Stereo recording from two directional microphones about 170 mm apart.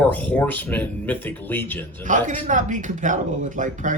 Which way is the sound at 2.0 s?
50° right (ahead or behind).